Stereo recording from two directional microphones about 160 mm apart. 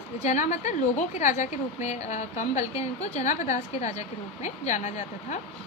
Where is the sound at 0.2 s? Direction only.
50° left (ahead or behind).